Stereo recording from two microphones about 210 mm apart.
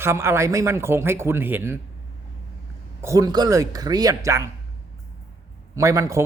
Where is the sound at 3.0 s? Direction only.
15° right (ahead or behind).